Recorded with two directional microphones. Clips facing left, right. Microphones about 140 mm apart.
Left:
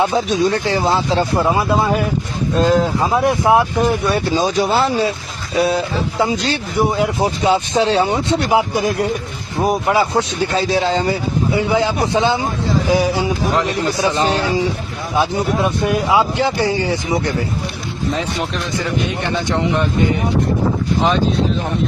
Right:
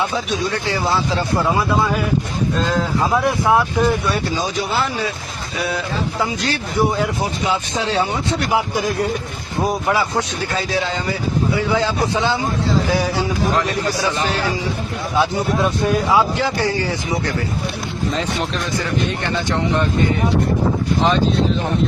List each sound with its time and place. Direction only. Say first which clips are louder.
0.8 s speech: left 2 dB; 20° left (ahead or behind)
4.7 s speech: left 5 dB; 35° left (ahead or behind)
15.8 s speech: even; 20° left (ahead or behind)